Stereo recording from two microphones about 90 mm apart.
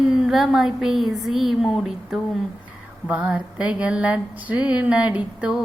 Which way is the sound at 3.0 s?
10° right (ahead or behind).